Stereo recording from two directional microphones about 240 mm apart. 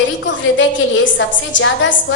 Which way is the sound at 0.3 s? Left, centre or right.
Left.